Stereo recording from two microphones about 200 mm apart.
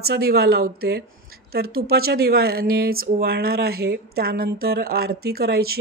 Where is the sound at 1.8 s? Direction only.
50° right (ahead or behind).